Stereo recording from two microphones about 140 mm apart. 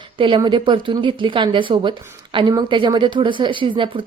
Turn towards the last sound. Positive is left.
turn(degrees=-35)  # may be behind; listen again after turning